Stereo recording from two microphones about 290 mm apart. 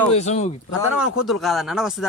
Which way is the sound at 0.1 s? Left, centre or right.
Left.